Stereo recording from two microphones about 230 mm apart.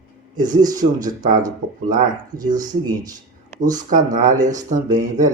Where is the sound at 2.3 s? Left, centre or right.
Centre.